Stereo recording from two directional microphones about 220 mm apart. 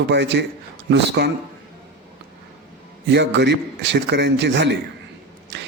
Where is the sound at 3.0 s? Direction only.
50° right (ahead or behind).